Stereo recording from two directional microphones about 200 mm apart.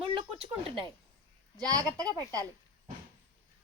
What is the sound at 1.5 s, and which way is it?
Speech, 20° right (ahead or behind).